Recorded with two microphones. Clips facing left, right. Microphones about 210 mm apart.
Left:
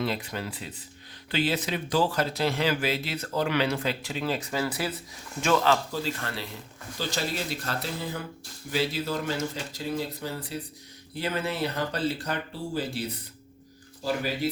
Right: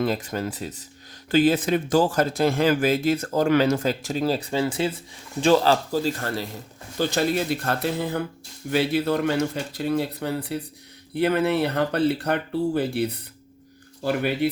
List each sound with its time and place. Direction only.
0.0 s a man's voice: 45° right (ahead or behind)
7.0 s speech: 55° right (ahead or behind)